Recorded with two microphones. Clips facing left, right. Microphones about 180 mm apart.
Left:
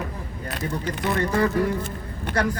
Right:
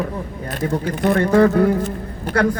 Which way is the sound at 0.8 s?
55° right (ahead or behind).